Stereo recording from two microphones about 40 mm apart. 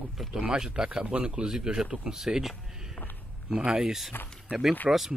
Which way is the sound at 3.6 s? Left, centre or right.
Right.